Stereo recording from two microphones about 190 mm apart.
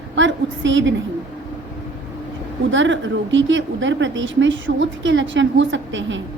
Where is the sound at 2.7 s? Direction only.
75° right (ahead or behind).